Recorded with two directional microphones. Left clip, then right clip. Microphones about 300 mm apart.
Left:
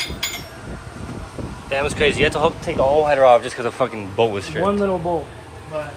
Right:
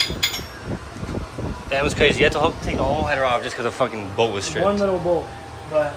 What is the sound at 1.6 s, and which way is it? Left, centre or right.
Speech, centre.